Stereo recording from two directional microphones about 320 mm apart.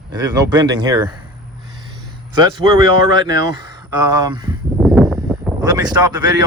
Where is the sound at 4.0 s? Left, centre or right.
Centre.